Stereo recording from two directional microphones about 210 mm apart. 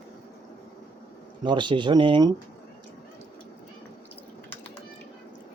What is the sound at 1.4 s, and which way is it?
Speech, 20° right (ahead or behind).